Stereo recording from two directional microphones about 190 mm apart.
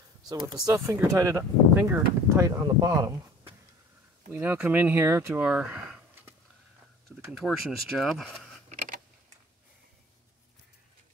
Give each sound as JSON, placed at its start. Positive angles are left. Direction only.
{"t": 0.2, "sound": "speech", "side_deg": -20}
{"t": 8.6, "sound": "typing", "side_deg": -45}